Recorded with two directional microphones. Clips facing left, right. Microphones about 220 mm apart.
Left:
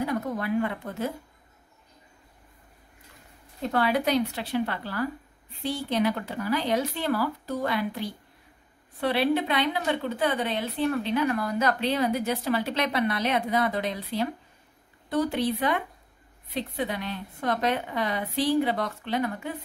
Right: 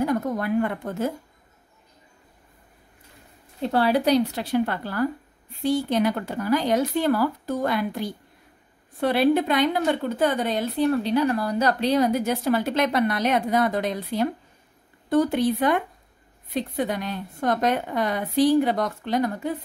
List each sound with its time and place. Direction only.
0.0 s a woman's voice: 45° right (ahead or behind)
3.6 s a woman's voice: 35° right (ahead or behind)